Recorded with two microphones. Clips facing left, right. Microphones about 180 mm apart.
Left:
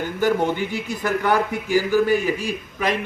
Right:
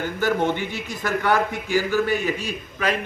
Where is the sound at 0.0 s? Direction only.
15° left (ahead or behind).